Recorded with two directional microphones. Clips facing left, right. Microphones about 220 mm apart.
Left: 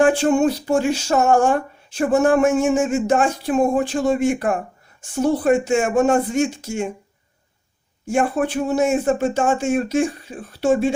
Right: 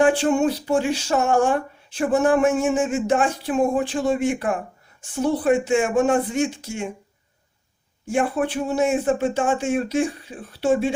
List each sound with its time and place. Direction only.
0.0 s speech: 45° left (ahead or behind)
8.0 s speech: 45° left (ahead or behind)